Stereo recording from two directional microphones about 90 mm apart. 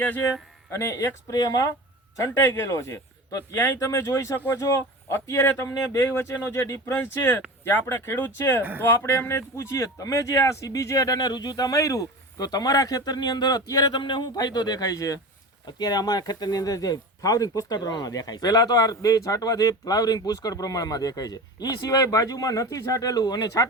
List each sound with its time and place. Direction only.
0.0 s speech: 20° left (ahead or behind)
0.7 s speech: 30° left (ahead or behind); by 23.6 s 45° left (ahead or behind)